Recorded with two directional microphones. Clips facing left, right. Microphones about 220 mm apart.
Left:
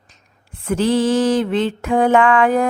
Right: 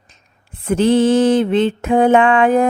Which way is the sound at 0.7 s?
25° right (ahead or behind).